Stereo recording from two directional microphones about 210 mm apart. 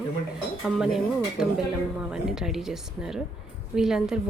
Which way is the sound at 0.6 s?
Centre (ahead or behind).